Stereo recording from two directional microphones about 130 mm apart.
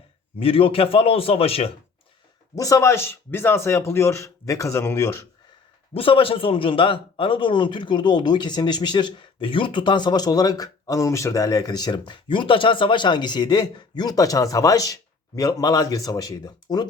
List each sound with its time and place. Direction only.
0.3 s a man's voice: 45° left (ahead or behind)
2.6 s speech: 25° left (ahead or behind)
5.9 s speech: 45° left (ahead or behind)